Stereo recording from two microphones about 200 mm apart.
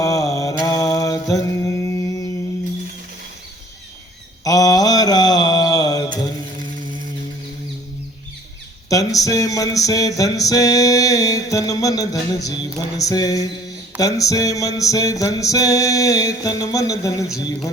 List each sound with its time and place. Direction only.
0.0 s mantra: 15° left (ahead or behind)
4.4 s mantra: 15° left (ahead or behind)
8.9 s a sound: 15° left (ahead or behind)